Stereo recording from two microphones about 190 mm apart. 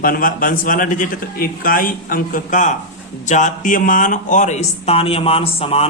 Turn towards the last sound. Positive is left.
turn(degrees=30)  # may be behind; listen again after turning